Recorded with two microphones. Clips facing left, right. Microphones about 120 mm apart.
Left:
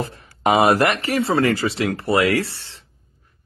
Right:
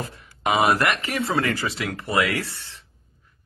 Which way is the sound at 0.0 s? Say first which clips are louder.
Left 6 dB; 35° left (ahead or behind).